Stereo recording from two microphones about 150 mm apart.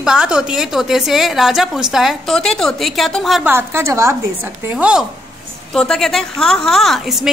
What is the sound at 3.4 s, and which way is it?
A woman's voice, 15° right (ahead or behind).